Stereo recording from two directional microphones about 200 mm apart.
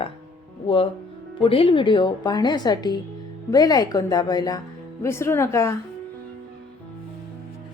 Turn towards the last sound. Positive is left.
turn(degrees=15)  # may be behind; listen again after turning